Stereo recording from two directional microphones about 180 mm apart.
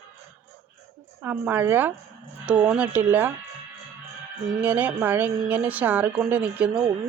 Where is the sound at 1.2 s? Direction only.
10° right (ahead or behind).